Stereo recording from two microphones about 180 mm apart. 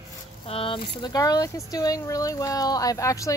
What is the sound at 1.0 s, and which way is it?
Speech, 20° left (ahead or behind).